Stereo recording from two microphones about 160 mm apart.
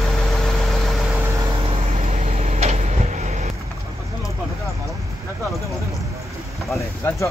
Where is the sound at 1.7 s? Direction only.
45° right (ahead or behind).